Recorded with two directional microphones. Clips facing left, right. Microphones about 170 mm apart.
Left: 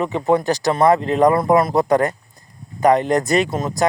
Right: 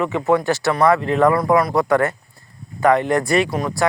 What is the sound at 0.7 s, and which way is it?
Speech, 25° left (ahead or behind).